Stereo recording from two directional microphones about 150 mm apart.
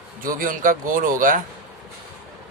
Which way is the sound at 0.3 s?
65° right (ahead or behind).